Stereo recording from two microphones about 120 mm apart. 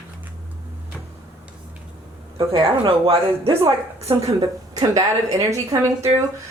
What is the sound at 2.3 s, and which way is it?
A woman's voice, 45° right (ahead or behind).